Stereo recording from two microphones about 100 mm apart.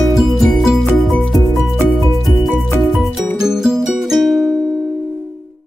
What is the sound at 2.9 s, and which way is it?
Music, centre (ahead or behind).